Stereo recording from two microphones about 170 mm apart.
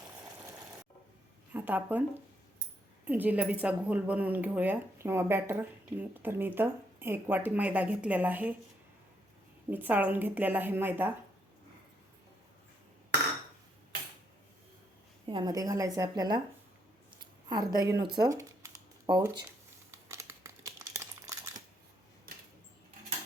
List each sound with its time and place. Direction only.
1.5 s a woman's voice: 10° right (ahead or behind)
3.1 s a woman's voice: 10° right (ahead or behind)
9.6 s a woman's voice: 10° right (ahead or behind)
15.3 s a woman's voice: 25° right (ahead or behind)
17.2 s a sound: 25° right (ahead or behind)
20.1 s crumpling: 15° right (ahead or behind)